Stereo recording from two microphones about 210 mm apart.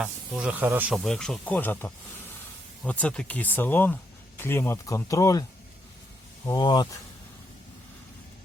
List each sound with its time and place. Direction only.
0.0 s speech: 5° right (ahead or behind); by 6.8 s 20° left (ahead or behind)